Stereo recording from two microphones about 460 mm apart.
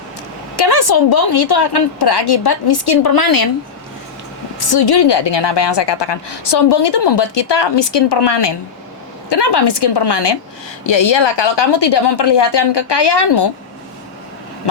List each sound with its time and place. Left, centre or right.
0.5 s a woman's voice: left
4.7 s a woman's voice: left